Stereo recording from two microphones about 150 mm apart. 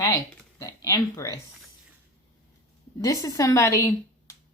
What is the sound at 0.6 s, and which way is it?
Speech, 25° left (ahead or behind).